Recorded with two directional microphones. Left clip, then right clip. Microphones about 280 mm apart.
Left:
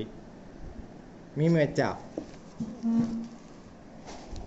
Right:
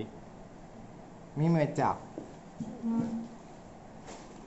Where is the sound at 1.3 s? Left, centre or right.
Centre.